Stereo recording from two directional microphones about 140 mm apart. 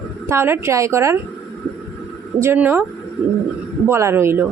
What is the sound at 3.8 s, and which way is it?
Speech, 20° right (ahead or behind).